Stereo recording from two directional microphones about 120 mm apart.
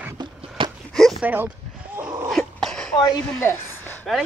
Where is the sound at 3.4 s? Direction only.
20° left (ahead or behind).